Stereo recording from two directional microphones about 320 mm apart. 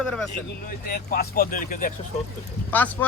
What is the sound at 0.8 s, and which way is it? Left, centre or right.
Speech, left.